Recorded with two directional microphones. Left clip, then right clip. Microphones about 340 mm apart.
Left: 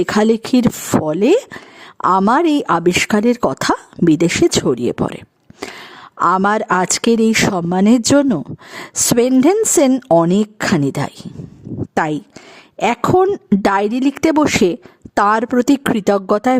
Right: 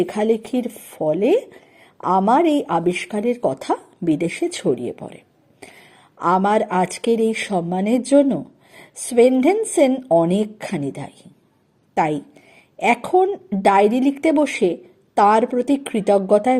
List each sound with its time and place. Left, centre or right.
0.0 s speech: left